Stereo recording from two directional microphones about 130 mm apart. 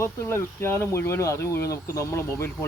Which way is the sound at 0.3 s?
20° left (ahead or behind).